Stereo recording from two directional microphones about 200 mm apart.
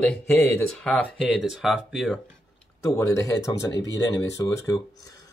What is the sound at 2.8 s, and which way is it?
Speech, 15° left (ahead or behind).